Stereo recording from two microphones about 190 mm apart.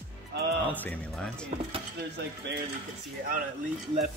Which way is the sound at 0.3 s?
70° right (ahead or behind).